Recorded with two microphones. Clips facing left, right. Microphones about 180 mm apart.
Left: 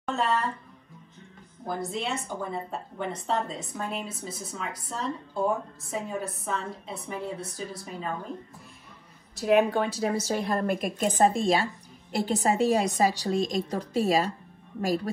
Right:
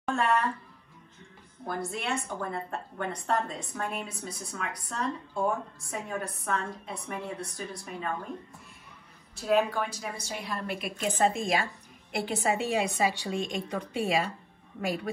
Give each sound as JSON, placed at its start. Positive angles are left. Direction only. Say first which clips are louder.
{"t": 0.0, "sound": "a sound", "louder": "even", "side_deg": 0}
{"t": 1.7, "sound": "a woman's voice", "louder": "left 2 dB", "side_deg": 0}
{"t": 9.7, "sound": "speech", "louder": "left 7 dB", "side_deg": 65}
{"t": 10.2, "sound": "a woman's voice", "louder": "left 9 dB", "side_deg": 50}